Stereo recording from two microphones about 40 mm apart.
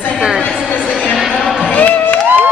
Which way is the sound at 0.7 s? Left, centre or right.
Right.